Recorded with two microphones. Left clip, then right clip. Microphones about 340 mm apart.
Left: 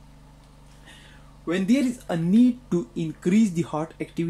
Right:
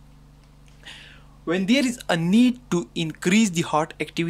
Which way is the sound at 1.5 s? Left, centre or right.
Right.